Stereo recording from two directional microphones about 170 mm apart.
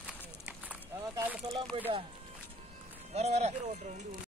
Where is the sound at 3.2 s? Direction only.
40° right (ahead or behind).